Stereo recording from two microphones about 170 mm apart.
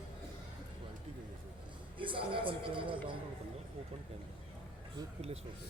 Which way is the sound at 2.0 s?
30° right (ahead or behind).